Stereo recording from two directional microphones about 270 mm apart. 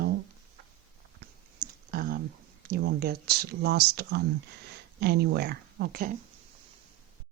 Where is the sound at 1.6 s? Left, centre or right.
Right.